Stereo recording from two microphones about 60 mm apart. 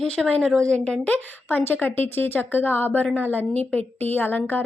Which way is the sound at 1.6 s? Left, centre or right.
Left.